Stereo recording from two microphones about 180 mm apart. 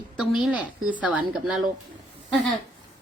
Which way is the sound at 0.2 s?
Centre (ahead or behind).